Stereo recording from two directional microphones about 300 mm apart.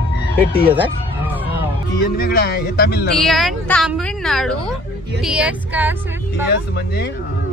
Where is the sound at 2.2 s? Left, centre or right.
Left.